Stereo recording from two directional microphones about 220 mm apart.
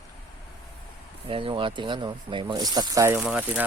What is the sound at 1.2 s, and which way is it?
Speech, 25° right (ahead or behind).